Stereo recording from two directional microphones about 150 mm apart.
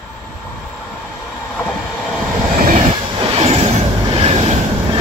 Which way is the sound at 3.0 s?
40° right (ahead or behind).